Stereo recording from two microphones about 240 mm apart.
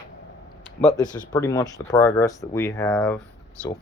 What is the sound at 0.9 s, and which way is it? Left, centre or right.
Speech, centre.